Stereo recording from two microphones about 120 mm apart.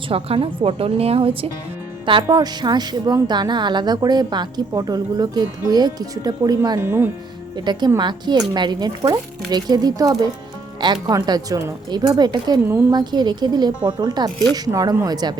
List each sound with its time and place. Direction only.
0.1 s a woman's voice: 50° right (ahead or behind)
2.2 s a woman's voice: 35° right (ahead or behind)
6.7 s speech: 20° right (ahead or behind)
7.5 s a woman's voice: 35° right (ahead or behind)